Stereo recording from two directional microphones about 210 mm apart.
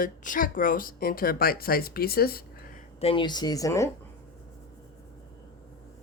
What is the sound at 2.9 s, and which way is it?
Speech, 25° left (ahead or behind).